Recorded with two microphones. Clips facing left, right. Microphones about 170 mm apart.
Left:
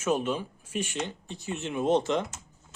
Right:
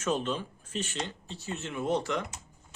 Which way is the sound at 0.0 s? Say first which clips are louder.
Left 3 dB; 10° left (ahead or behind).